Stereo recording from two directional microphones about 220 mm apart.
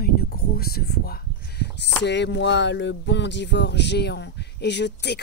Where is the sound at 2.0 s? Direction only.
50° left (ahead or behind).